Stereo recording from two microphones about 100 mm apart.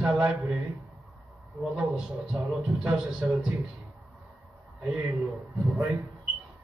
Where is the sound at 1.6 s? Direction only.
5° right (ahead or behind).